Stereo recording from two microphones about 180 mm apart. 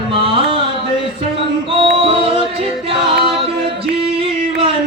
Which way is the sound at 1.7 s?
30° right (ahead or behind).